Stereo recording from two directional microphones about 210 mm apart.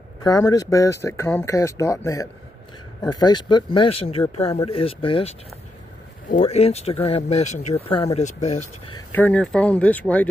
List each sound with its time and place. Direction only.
0.2 s speech: 15° left (ahead or behind)
6.3 s speech: 25° left (ahead or behind)
9.1 s speech: 5° left (ahead or behind)